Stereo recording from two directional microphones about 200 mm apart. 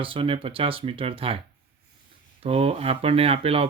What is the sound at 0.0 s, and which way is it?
Speech, 25° right (ahead or behind).